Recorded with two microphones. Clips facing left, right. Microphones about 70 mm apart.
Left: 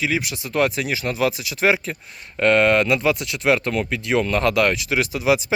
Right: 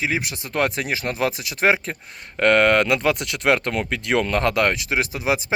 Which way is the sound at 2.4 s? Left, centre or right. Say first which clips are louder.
Even; right.